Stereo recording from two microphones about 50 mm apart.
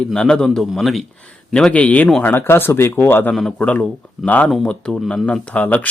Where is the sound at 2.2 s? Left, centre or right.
Left.